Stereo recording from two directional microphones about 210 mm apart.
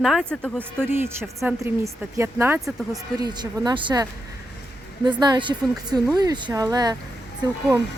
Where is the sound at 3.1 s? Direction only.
20° right (ahead or behind).